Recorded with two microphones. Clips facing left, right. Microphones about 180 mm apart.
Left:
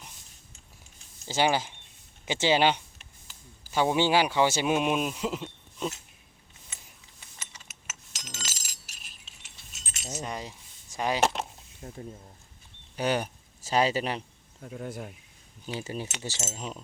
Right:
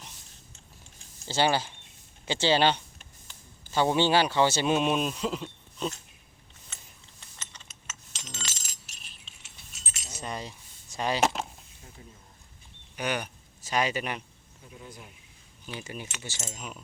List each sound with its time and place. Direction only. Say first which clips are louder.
1.3 s speech: even; 15° left (ahead or behind)
7.5 s chink: even; 10° left (ahead or behind)
10.2 s a sound: even; 15° left (ahead or behind)
10.9 s speech: left 1 dB; 15° left (ahead or behind)
11.8 s speech: left 11 dB; 50° left (ahead or behind)
13.0 s speech: left 4 dB; 35° left (ahead or behind)
14.6 s speech: left 9 dB; 60° left (ahead or behind)
15.6 s speech: left 5 dB; 35° left (ahead or behind)